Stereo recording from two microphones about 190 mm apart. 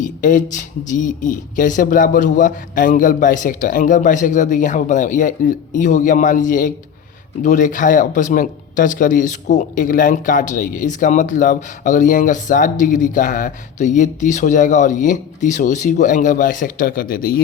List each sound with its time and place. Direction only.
0.0 s speech: 45° left (ahead or behind)